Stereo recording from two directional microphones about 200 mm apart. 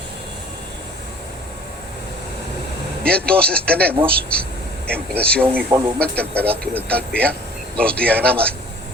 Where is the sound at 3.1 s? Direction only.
5° left (ahead or behind).